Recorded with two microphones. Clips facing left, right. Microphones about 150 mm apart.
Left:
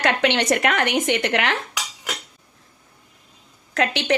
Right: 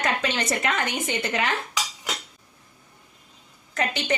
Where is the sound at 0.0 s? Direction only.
75° left (ahead or behind).